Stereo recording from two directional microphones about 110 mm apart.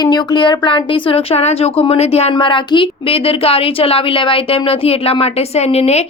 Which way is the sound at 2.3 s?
45° left (ahead or behind).